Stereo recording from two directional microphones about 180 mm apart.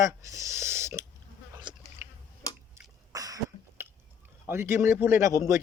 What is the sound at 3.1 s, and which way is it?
Cough, 20° right (ahead or behind).